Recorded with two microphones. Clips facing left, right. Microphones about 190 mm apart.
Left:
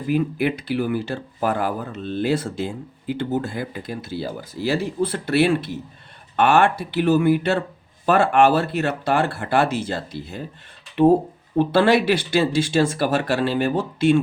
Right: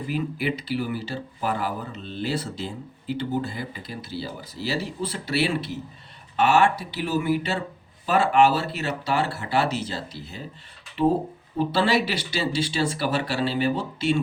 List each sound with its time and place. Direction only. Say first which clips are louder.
0.1 s speech: left 7 dB; 55° left (ahead or behind)
11.5 s speech: left 6 dB; 55° left (ahead or behind)